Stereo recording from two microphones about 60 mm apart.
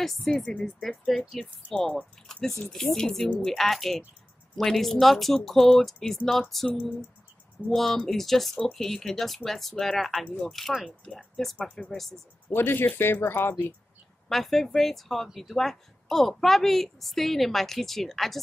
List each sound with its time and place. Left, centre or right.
0.2 s a woman's voice: centre
12.4 s speech: left
14.3 s a woman's voice: centre